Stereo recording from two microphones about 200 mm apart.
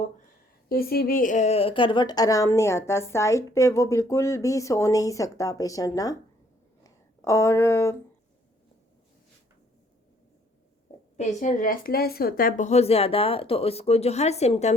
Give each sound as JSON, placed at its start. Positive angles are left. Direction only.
{"t": 0.7, "sound": "a woman's voice", "side_deg": 50}
{"t": 11.2, "sound": "a woman's voice", "side_deg": 35}